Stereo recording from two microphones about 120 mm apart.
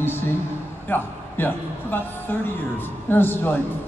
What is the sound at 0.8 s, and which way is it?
A man's voice, 15° left (ahead or behind).